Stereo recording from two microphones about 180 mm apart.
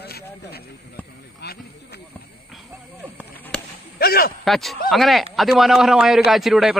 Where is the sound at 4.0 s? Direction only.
60° left (ahead or behind).